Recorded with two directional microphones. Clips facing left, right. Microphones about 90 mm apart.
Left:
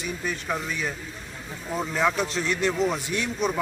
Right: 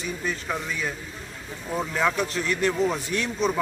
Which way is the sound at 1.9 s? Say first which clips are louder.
Left 1 dB; 15° left (ahead or behind).